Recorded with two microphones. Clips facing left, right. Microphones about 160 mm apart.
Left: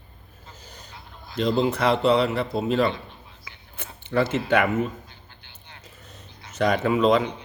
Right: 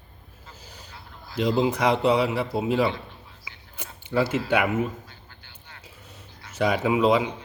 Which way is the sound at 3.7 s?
10° right (ahead or behind).